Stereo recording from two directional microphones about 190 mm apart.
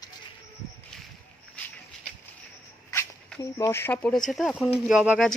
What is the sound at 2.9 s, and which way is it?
A woman's voice, 15° left (ahead or behind).